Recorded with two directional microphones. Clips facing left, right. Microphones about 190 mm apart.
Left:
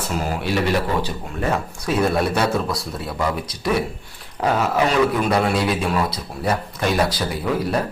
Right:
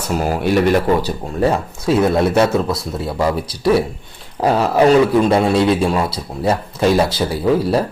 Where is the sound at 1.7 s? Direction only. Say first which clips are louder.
Right 4 dB; 25° right (ahead or behind).